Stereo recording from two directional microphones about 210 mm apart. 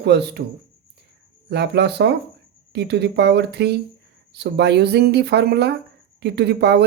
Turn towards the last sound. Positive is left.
turn(degrees=-50)  # may be behind; listen again after turning